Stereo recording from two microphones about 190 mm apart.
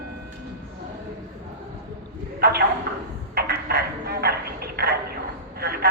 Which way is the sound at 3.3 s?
55° right (ahead or behind).